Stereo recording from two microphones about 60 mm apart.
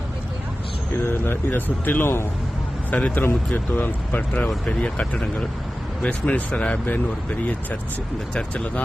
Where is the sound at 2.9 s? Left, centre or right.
Left.